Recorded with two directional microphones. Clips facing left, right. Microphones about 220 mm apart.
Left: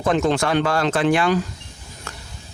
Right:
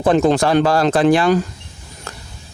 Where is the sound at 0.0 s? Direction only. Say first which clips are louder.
Right 5 dB; 35° right (ahead or behind).